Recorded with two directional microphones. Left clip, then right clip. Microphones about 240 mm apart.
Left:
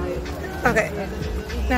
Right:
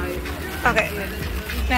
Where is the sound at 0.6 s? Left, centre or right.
Centre.